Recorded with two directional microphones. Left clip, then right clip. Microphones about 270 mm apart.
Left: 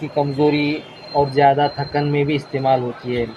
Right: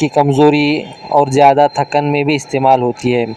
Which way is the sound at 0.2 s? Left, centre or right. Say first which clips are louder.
Right 6 dB; right.